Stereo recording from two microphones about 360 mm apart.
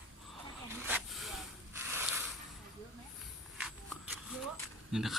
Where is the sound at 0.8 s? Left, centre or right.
Centre.